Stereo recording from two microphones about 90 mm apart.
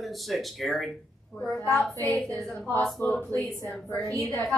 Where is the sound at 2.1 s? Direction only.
15° left (ahead or behind).